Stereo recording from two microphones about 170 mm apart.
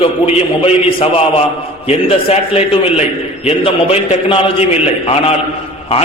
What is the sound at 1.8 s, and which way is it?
A man's voice, 35° left (ahead or behind).